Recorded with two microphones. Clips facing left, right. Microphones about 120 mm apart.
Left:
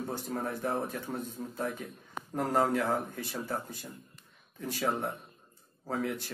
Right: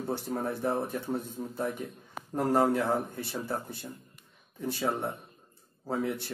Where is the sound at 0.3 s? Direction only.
20° right (ahead or behind).